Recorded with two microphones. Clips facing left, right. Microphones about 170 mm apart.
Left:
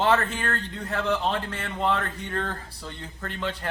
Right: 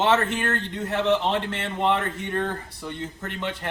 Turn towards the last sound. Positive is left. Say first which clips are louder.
# right 1 dB
turn(degrees=-20)  # may be behind; listen again after turning